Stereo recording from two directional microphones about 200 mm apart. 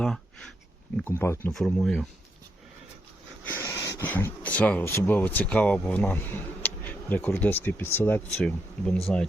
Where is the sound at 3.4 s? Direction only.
10° left (ahead or behind).